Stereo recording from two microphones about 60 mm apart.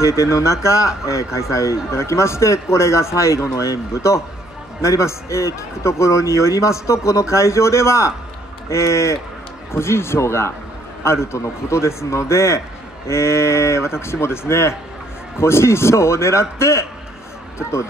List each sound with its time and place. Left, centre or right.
0.0 s a man's voice: left
3.5 s a man's voice: left